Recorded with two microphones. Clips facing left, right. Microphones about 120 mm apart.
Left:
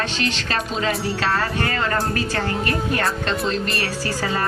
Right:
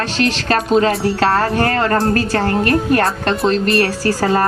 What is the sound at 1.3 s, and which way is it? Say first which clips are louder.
A woman's voice: right 7 dB; 50° right (ahead or behind).